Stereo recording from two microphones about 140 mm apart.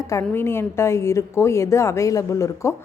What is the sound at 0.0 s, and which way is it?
A woman's voice, 20° left (ahead or behind).